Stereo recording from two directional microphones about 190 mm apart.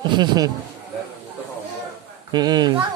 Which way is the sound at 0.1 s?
20° right (ahead or behind).